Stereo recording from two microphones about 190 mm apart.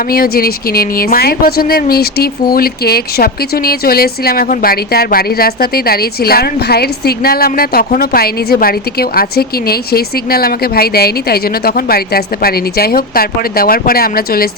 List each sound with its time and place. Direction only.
0.1 s speech: 50° left (ahead or behind)